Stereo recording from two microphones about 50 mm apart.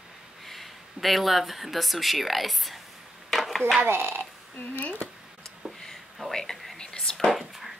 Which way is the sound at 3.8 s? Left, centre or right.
Right.